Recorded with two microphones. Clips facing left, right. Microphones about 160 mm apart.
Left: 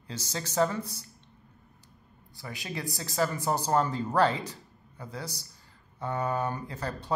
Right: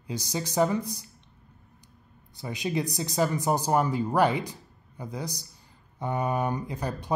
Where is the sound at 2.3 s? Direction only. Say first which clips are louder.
Right 8 dB; 20° right (ahead or behind).